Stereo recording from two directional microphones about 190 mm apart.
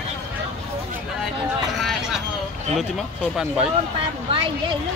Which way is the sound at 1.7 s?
Centre (ahead or behind).